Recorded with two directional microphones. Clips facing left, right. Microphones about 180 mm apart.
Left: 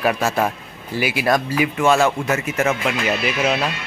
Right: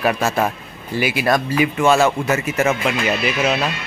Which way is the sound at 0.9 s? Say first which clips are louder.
Right 1 dB; 10° left (ahead or behind).